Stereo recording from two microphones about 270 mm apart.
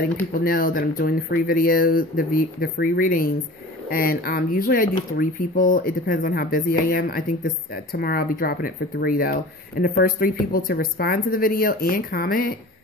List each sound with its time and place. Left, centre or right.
0.3 s speech: left